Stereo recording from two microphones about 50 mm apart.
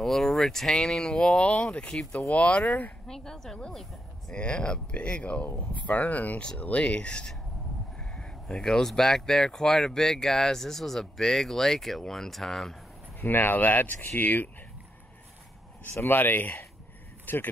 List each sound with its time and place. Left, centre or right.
0.0 s speech: centre; by 2.8 s left
3.1 s speech: centre
13.2 s speech: left
15.9 s speech: left